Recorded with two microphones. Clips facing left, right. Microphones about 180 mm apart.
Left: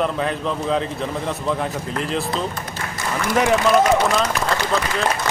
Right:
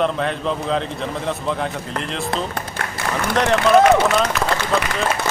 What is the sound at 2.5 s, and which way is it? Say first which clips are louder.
Applause: right 2 dB; 65° right (ahead or behind).